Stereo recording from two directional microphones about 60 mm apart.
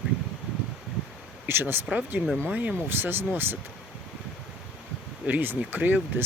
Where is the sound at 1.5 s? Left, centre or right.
Right.